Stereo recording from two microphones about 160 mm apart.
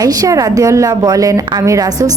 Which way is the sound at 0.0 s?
25° right (ahead or behind).